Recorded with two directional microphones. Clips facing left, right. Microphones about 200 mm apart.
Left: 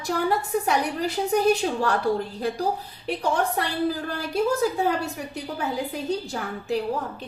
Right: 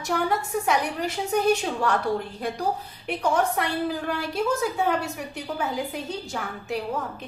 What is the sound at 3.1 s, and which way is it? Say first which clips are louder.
A woman's voice: right 1 dB; 35° left (ahead or behind).